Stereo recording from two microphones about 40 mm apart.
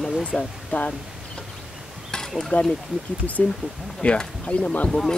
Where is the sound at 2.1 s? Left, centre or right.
Centre.